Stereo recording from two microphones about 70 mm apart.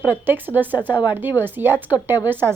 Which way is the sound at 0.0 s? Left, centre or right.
Right.